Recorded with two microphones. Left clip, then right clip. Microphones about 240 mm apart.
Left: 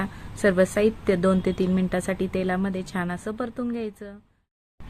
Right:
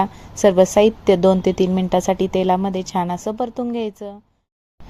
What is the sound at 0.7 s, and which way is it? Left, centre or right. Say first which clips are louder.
A woman's voice: right 8 dB; centre.